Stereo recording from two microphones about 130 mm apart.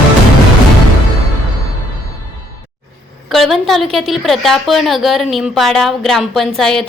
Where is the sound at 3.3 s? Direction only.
Centre (ahead or behind).